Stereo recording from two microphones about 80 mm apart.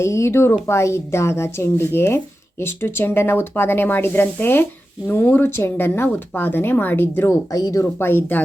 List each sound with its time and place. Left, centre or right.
0.0 s speech: left
7.5 s speech: left
7.9 s speech: left